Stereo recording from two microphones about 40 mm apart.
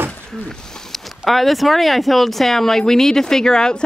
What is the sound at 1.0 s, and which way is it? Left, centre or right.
Speech, centre.